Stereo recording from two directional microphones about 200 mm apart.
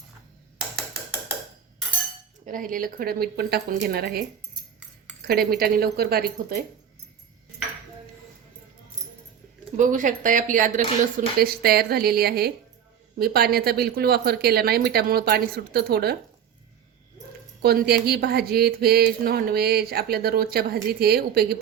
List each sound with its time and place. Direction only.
2.5 s speech: 45° right (ahead or behind)
5.2 s speech: 50° right (ahead or behind)
9.7 s speech: 40° right (ahead or behind)
11.3 s speech: 50° right (ahead or behind)
17.6 s speech: 50° right (ahead or behind)